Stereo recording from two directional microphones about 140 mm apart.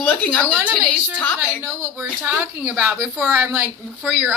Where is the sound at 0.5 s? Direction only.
5° right (ahead or behind).